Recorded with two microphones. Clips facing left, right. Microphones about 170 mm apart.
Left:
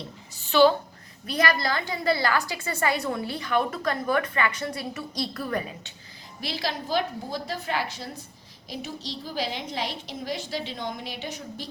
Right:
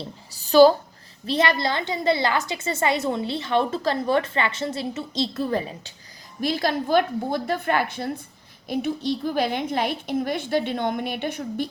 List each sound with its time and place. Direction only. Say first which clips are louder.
0.0 s a sound: right 4 dB; 35° right (ahead or behind)
1.3 s a woman's voice: right 3 dB; 25° right (ahead or behind)
6.4 s a woman's voice: right 8 dB; 50° right (ahead or behind)